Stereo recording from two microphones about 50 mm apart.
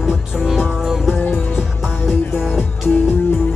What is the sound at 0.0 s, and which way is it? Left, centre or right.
Music, centre.